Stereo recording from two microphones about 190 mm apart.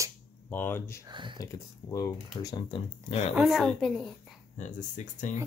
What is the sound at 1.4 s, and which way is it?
Speech, 20° left (ahead or behind).